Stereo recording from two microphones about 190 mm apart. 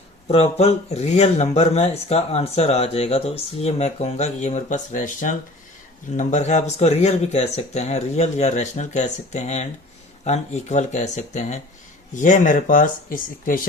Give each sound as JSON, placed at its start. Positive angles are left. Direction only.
{"t": 0.3, "sound": "speech", "side_deg": 30}